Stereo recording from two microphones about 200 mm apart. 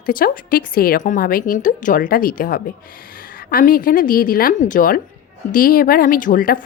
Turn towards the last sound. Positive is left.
turn(degrees=45)  # may be behind; listen again after turning